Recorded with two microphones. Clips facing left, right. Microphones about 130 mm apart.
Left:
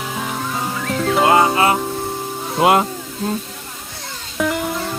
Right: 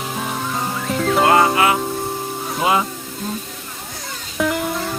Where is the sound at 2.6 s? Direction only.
65° left (ahead or behind).